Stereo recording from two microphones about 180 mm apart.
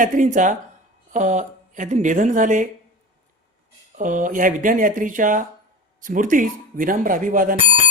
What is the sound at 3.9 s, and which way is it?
Speech, 45° right (ahead or behind).